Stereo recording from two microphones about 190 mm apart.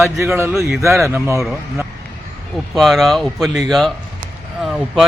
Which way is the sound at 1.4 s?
Centre (ahead or behind).